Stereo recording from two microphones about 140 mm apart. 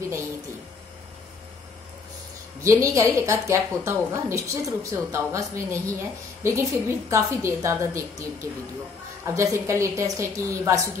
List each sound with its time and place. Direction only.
2.6 s a woman's voice: 20° right (ahead or behind)